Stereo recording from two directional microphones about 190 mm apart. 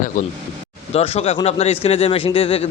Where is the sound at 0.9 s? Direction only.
30° left (ahead or behind).